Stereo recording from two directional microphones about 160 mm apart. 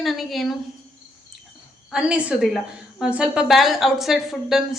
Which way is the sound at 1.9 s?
5° right (ahead or behind).